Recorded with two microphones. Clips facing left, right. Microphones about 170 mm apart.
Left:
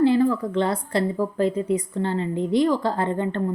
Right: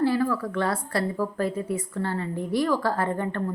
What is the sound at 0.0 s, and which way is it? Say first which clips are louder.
Speech: left 5 dB; 20° left (ahead or behind).